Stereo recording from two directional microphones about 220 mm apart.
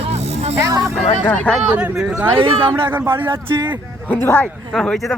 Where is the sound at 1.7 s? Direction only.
5° right (ahead or behind).